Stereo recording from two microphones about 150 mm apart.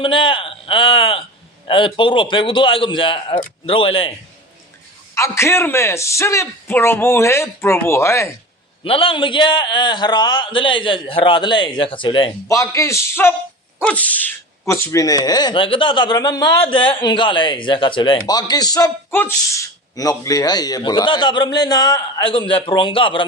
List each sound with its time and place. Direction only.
0.0 s a man's voice: 35° left (ahead or behind)
5.1 s a man's voice: 20° left (ahead or behind)
8.8 s a man's voice: 35° left (ahead or behind)
12.5 s a man's voice: 20° left (ahead or behind)
14.7 s speech: 25° left (ahead or behind)
19.1 s speech: 15° left (ahead or behind); by 23.2 s 35° left (ahead or behind)